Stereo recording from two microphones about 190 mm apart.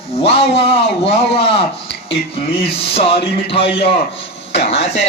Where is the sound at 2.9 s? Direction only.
30° left (ahead or behind).